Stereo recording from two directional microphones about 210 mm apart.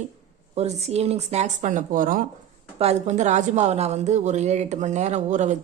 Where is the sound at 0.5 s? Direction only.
30° right (ahead or behind).